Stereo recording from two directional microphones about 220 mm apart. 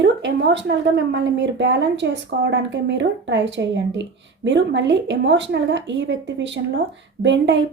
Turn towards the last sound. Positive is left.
turn(degrees=-55)  # may be behind; listen again after turning